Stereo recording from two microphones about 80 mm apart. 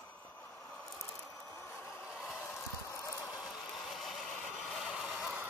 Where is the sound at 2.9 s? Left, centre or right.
Left.